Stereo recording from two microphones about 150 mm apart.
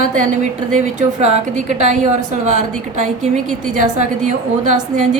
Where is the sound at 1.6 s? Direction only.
55° right (ahead or behind).